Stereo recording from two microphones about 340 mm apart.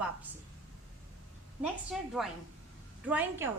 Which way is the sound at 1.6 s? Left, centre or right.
Centre.